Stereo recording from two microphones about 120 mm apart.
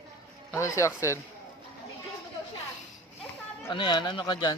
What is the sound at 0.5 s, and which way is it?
Speech, 25° left (ahead or behind).